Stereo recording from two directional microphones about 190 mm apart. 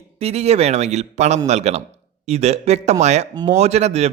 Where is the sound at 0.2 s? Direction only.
35° right (ahead or behind).